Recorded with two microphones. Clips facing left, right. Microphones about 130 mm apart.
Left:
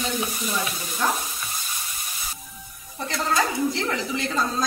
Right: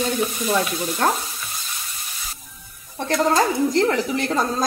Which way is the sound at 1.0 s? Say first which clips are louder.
Right 4 dB; 60° right (ahead or behind).